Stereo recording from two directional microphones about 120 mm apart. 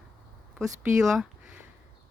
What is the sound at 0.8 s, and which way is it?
Speech, 5° right (ahead or behind).